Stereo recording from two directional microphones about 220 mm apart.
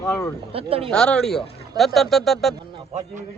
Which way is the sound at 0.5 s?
25° right (ahead or behind).